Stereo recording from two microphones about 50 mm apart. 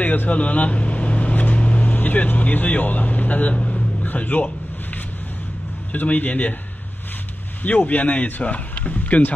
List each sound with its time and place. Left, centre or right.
0.0 s speech: left
3.5 s vehicle: left
4.0 s speech: left
5.9 s a man's voice: left
7.6 s speech: left